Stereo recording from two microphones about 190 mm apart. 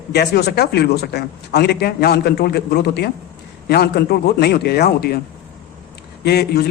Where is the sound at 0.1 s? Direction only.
60° left (ahead or behind).